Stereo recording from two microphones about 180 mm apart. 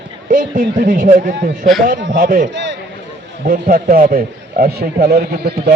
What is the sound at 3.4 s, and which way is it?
A man's voice, 50° right (ahead or behind).